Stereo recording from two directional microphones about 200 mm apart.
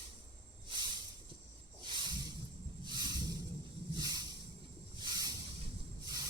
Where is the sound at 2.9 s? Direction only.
20° right (ahead or behind).